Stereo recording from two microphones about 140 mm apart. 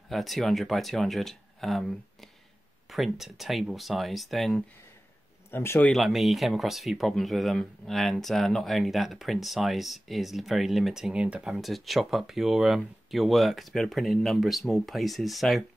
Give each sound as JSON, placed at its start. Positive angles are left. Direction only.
{"t": 0.1, "sound": "speech", "side_deg": 0}
{"t": 5.5, "sound": "speech", "side_deg": 15}
{"t": 5.9, "sound": "speech", "side_deg": 0}